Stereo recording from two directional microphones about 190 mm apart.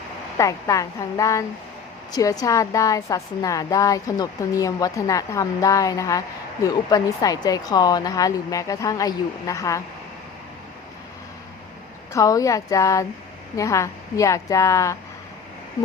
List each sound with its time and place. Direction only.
0.3 s a woman's voice: 15° left (ahead or behind)
12.1 s a woman's voice: 15° left (ahead or behind)